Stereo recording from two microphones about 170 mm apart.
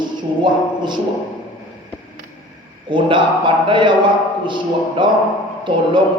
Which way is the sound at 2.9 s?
30° right (ahead or behind).